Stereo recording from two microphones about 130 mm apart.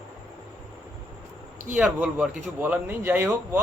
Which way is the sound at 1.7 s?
5° right (ahead or behind).